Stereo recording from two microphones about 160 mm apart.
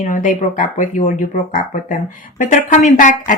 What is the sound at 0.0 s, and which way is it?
Speech, 55° left (ahead or behind).